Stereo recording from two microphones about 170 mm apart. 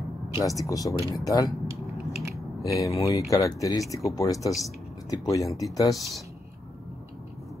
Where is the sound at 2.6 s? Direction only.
20° left (ahead or behind).